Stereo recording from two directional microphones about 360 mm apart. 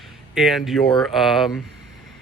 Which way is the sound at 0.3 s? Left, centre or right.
Centre.